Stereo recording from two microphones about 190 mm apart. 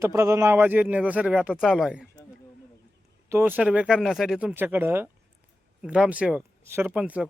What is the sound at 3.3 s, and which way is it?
Speech, 10° right (ahead or behind).